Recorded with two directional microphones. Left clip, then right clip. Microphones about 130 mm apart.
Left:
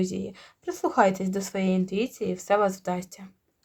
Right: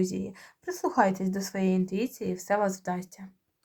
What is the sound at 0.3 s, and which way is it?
Speech, 40° left (ahead or behind).